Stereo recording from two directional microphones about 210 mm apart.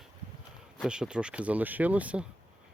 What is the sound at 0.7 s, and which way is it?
Speech, 5° right (ahead or behind).